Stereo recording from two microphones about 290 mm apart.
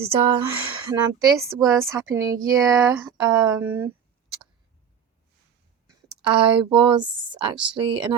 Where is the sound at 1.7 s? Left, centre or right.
Centre.